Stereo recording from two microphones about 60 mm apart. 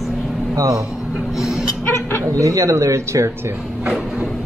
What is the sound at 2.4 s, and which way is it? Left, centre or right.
Speech, right.